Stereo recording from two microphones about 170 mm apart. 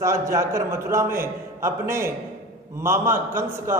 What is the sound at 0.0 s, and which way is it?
A man's voice, 15° right (ahead or behind).